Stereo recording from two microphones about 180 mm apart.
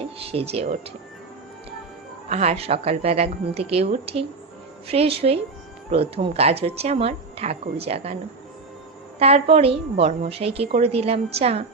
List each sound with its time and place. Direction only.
0.2 s speech: 35° right (ahead or behind)
2.3 s speech: 35° right (ahead or behind)
9.1 s speech: 35° right (ahead or behind)